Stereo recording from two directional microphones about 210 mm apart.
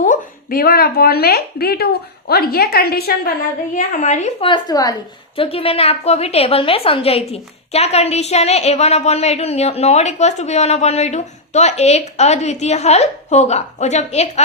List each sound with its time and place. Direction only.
0.0 s speech: 40° left (ahead or behind)
3.8 s a woman's voice: 35° left (ahead or behind)